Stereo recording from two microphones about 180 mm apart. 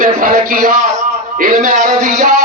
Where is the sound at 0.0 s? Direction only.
50° right (ahead or behind).